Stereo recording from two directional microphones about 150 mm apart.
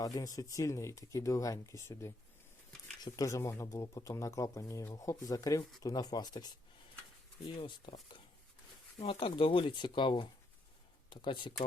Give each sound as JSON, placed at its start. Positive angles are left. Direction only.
{"t": 0.0, "sound": "speech", "side_deg": 25}
{"t": 7.4, "sound": "speech", "side_deg": 35}